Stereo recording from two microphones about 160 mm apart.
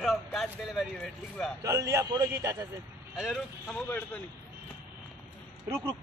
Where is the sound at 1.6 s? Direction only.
20° right (ahead or behind).